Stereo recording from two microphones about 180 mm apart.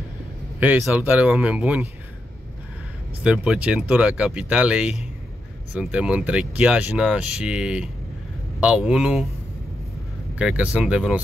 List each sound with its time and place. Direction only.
0.6 s speech: 10° right (ahead or behind)
3.3 s speech: 5° right (ahead or behind)
10.3 s speech: 10° right (ahead or behind)